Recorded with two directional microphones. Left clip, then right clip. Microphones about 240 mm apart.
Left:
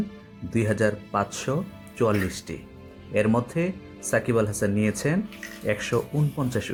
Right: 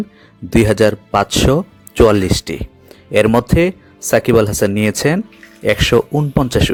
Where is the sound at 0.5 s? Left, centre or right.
Right.